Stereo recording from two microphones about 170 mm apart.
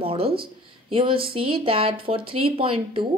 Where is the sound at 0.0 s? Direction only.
35° right (ahead or behind).